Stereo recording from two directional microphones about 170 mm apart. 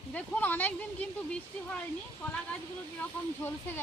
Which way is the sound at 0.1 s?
10° left (ahead or behind).